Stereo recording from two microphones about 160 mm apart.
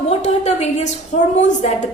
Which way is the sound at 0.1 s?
45° left (ahead or behind).